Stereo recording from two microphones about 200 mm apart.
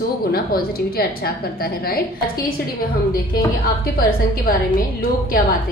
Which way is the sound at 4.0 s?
45° left (ahead or behind).